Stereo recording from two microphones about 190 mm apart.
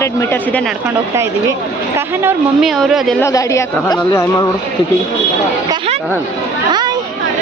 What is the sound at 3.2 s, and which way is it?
Speech, 15° left (ahead or behind).